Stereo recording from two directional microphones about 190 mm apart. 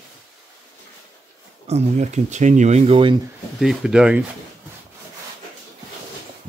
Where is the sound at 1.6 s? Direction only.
35° right (ahead or behind).